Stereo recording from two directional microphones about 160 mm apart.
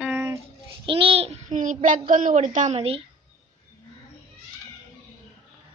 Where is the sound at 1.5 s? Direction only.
55° right (ahead or behind); by 3.0 s 40° right (ahead or behind).